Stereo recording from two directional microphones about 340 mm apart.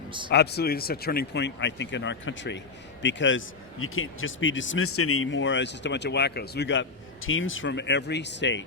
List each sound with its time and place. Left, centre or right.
0.3 s a man's voice: left